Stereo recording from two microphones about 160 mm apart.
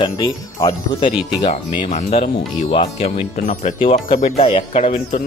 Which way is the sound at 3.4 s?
60° left (ahead or behind).